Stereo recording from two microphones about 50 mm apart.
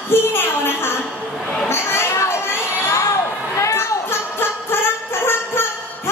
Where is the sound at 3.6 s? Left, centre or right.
Left.